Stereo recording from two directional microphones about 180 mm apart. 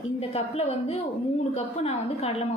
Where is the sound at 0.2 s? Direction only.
35° left (ahead or behind).